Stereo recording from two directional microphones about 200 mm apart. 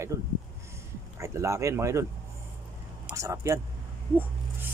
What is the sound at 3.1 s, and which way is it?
Speech, 15° right (ahead or behind).